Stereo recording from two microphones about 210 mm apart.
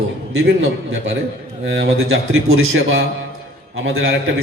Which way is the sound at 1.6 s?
60° right (ahead or behind).